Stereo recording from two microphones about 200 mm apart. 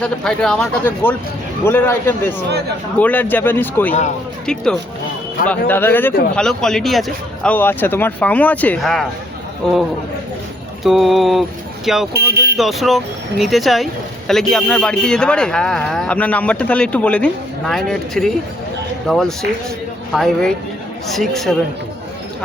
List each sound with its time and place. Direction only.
0.0 s speech: 5° left (ahead or behind)
10.8 s speech: centre (ahead or behind)
12.1 s speech: 55° right (ahead or behind)
12.5 s speech: centre (ahead or behind)